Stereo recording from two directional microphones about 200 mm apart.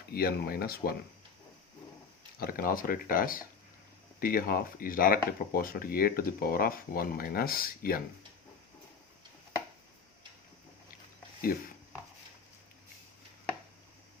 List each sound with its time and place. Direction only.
0.1 s speech: 50° left (ahead or behind)
2.4 s speech: 45° left (ahead or behind)